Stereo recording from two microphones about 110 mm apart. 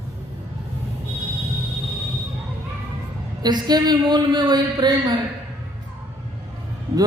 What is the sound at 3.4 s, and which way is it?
Speech, 40° right (ahead or behind).